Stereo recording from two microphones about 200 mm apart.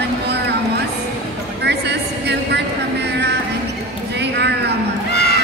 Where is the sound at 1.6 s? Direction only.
55° right (ahead or behind).